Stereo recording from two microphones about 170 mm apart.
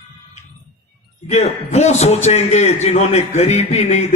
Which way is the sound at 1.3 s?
40° left (ahead or behind).